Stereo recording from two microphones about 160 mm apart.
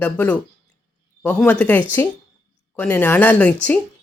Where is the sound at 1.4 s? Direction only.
10° left (ahead or behind).